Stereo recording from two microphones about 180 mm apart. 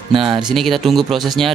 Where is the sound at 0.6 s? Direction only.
Centre (ahead or behind).